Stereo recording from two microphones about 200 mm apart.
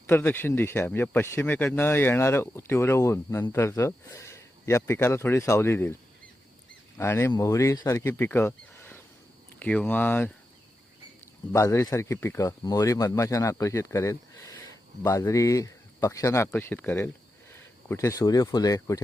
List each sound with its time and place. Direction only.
0.1 s speech: 10° left (ahead or behind)
7.0 s speech: 10° left (ahead or behind)
11.5 s speech: 15° left (ahead or behind)